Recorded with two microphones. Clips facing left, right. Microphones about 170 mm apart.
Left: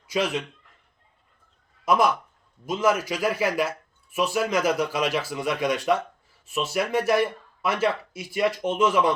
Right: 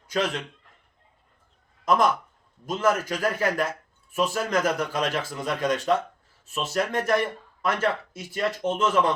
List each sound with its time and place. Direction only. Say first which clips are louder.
0.1 s a man's voice: left 1 dB; 10° left (ahead or behind)
1.8 s a man's voice: even; 10° left (ahead or behind)